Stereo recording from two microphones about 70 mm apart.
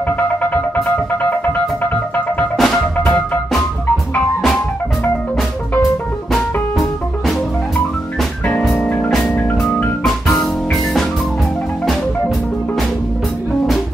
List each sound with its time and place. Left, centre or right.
1.3 s music: left
2.5 s music: centre
8.5 s music: left
10.0 s music: centre